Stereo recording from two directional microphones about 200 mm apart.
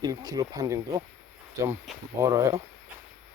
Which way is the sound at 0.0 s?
20° right (ahead or behind).